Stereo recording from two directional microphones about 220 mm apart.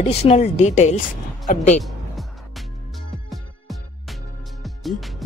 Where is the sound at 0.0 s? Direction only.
30° left (ahead or behind).